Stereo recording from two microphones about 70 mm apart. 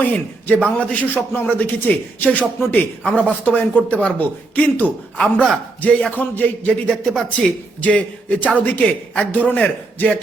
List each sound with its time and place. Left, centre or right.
0.0 s a man's voice: left
5.2 s a man's voice: centre
5.8 s a man's voice: centre
6.9 s a man's voice: centre
7.8 s speech: centre